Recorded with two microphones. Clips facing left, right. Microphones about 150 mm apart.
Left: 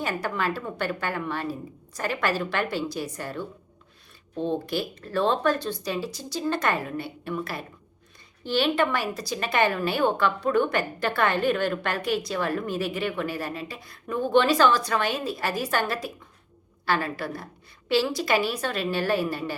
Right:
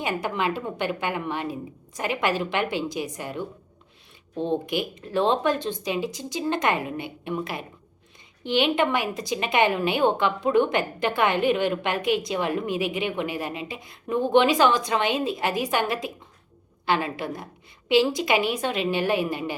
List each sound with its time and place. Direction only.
0.0 s a woman's voice: 15° right (ahead or behind)